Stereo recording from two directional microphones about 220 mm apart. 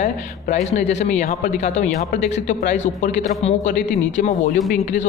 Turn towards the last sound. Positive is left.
turn(degrees=35)  # may be behind; listen again after turning